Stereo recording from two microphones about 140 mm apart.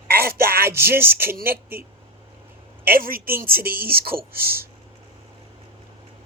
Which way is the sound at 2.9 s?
90° right.